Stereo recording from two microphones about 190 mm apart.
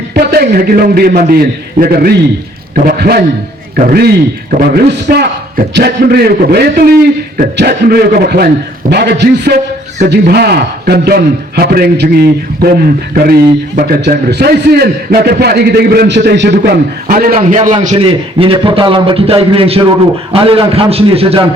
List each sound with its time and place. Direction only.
0.1 s a man's voice: 60° right (ahead or behind); by 21.4 s 30° right (ahead or behind)